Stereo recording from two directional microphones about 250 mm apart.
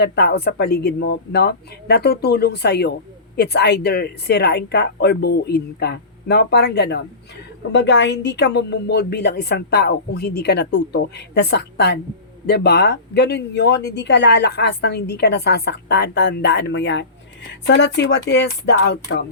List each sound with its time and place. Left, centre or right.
0.0 s speech: left